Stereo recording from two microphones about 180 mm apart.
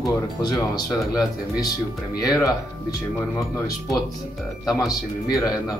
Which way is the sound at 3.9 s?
Centre (ahead or behind).